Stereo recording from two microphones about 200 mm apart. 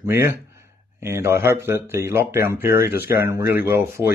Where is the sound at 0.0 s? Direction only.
10° right (ahead or behind).